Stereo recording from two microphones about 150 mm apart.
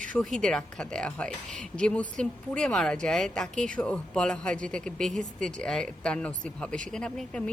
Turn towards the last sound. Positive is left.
turn(degrees=5)  # may be behind; listen again after turning